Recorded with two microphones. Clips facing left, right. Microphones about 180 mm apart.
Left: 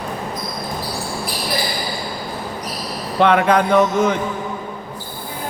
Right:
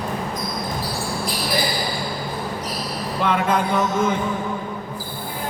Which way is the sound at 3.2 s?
75° left (ahead or behind).